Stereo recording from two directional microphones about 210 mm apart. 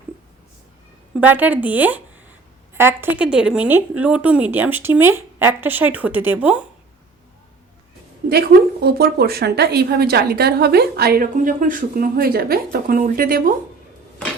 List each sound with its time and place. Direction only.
1.2 s a woman's voice: 10° right (ahead or behind)
8.3 s a woman's voice: 50° right (ahead or behind)